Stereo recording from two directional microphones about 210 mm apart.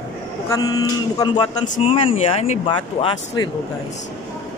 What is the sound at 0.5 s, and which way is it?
Speech, 15° left (ahead or behind).